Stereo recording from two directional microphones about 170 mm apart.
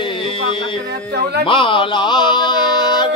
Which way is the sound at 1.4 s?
30° left (ahead or behind).